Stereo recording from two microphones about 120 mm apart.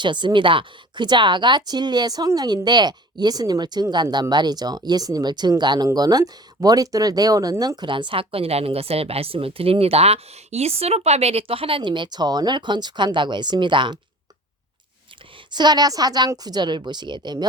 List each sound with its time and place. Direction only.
0.0 s speech: 40° right (ahead or behind)
7.8 s speech: 40° right (ahead or behind)
15.5 s speech: 35° right (ahead or behind)